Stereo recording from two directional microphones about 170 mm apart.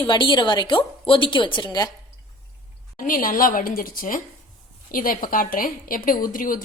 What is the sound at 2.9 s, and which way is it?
A woman's voice, 55° left (ahead or behind).